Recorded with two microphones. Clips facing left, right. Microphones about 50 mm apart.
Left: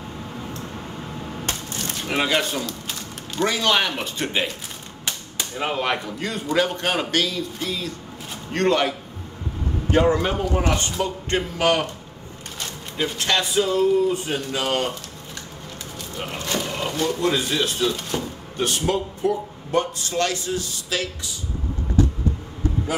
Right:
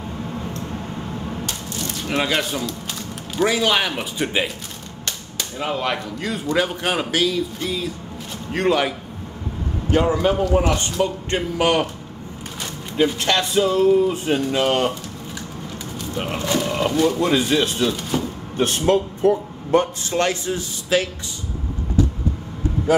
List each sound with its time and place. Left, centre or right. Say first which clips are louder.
2.0 s speech: even; centre
5.0 s whip: even; centre
6.1 s speech: right 1 dB; centre
10.1 s speech: right 4 dB; centre
11.0 s speech: right 2 dB; centre
12.9 s speech: right 4 dB; centre
16.4 s speech: right 5 dB; centre
18.6 s a man's voice: right 5 dB; right